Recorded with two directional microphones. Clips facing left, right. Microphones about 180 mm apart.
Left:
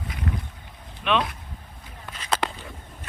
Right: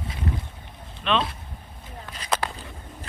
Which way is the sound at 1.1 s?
10° left (ahead or behind).